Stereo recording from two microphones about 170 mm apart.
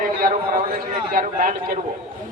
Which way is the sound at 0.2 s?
60° right (ahead or behind).